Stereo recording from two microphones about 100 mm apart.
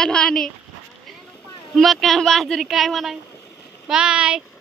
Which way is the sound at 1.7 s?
Centre (ahead or behind).